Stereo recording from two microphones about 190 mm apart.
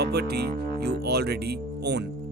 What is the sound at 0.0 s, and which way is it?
Speech, 60° right (ahead or behind).